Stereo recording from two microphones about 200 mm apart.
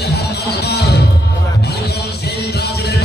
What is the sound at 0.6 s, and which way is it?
Music, 55° left (ahead or behind).